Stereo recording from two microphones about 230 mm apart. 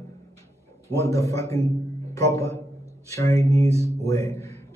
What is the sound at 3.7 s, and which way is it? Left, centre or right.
Speech, centre.